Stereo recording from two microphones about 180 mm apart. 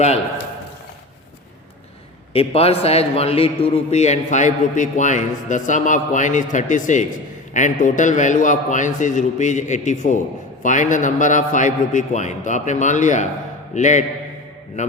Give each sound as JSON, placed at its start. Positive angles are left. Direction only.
{"t": 2.3, "sound": "a man's voice", "side_deg": 35}